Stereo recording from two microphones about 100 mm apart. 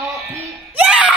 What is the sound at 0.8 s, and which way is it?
Screaming, 10° right (ahead or behind).